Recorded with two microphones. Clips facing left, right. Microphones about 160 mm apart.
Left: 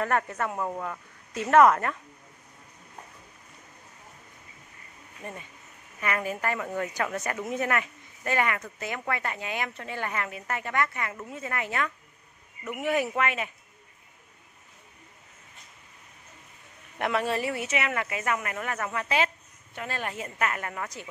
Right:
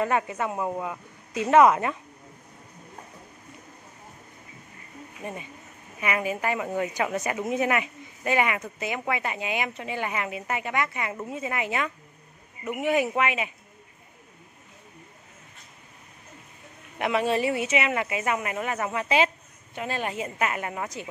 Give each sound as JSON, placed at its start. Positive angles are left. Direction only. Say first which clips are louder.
{"t": 0.0, "sound": "speech", "louder": "right 2 dB", "side_deg": -15}
{"t": 5.9, "sound": "speech", "louder": "right 2 dB", "side_deg": -15}
{"t": 17.0, "sound": "speech", "louder": "right 3 dB", "side_deg": -20}